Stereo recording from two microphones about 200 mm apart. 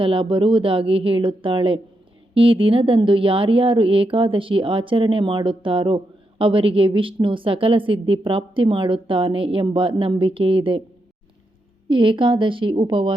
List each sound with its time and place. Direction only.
0.0 s a woman's voice: 25° right (ahead or behind)
11.9 s a woman's voice: 25° right (ahead or behind)